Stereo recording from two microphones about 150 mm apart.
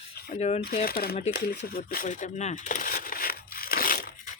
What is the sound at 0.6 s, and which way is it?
Speech, 85° left.